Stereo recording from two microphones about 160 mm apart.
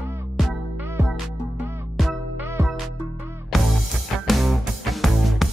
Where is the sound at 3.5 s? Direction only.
Centre (ahead or behind).